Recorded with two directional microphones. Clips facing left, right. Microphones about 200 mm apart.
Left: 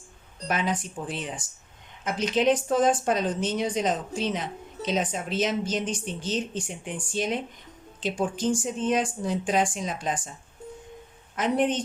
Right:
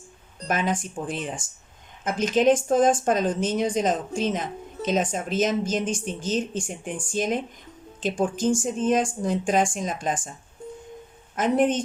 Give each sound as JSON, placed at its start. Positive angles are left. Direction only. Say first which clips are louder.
{"t": 0.4, "sound": "a woman's voice", "louder": "right 2 dB", "side_deg": -45}
{"t": 11.3, "sound": "a woman's voice", "louder": "right 3 dB", "side_deg": -45}